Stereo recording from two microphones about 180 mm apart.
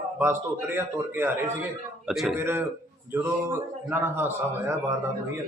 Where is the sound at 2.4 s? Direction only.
15° right (ahead or behind).